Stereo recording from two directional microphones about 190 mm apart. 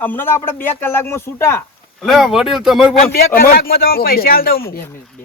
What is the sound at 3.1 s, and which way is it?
Speech, 50° left (ahead or behind).